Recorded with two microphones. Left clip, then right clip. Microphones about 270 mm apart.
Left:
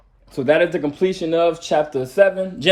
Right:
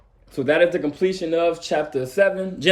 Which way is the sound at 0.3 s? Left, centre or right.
Centre.